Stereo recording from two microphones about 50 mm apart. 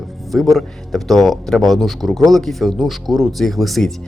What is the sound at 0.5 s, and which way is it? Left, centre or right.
Speech, centre.